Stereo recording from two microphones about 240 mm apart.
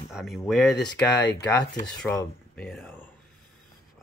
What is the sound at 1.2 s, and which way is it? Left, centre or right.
Speech, left.